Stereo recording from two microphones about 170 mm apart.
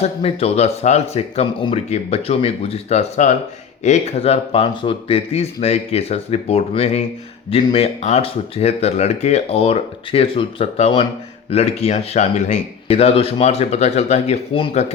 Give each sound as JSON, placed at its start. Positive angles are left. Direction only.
{"t": 0.0, "sound": "speech", "side_deg": 35}